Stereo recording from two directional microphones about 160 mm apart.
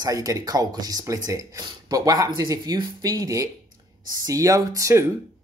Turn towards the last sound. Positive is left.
turn(degrees=-20)  # may be behind; listen again after turning